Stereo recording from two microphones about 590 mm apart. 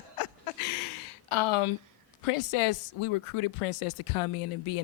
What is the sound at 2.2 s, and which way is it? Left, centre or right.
A woman's voice, left.